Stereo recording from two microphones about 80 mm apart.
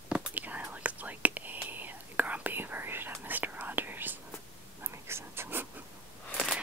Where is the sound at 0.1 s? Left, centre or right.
Right.